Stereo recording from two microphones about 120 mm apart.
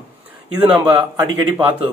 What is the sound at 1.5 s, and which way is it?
Speech, 15° right (ahead or behind).